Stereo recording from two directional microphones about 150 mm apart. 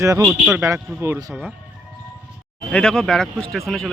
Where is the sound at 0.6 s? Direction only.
20° right (ahead or behind).